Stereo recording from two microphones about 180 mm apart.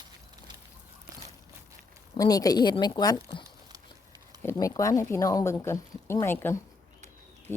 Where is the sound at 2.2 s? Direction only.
20° left (ahead or behind).